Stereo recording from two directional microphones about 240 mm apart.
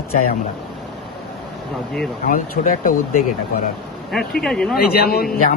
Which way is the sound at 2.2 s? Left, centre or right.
Left.